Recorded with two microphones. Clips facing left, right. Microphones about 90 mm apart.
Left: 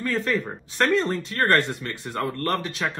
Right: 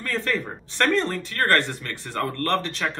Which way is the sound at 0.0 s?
10° left (ahead or behind).